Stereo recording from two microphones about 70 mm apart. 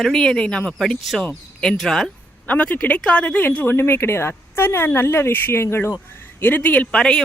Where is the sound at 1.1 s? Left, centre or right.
Centre.